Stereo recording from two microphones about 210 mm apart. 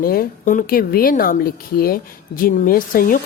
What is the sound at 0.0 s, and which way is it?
A woman's voice, 45° left (ahead or behind).